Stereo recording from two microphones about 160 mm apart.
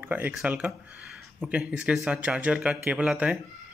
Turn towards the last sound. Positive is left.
turn(degrees=-5)  # may be behind; listen again after turning